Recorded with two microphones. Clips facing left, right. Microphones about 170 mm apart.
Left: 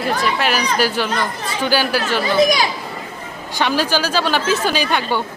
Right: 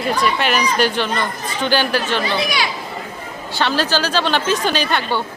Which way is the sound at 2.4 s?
45° left (ahead or behind).